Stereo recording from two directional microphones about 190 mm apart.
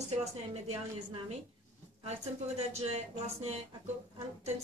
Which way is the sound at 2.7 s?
35° right (ahead or behind).